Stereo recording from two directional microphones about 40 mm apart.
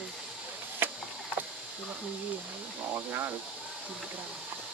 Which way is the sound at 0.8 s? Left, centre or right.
Right.